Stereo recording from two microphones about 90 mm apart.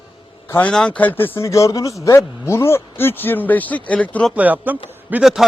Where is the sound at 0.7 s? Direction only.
10° left (ahead or behind).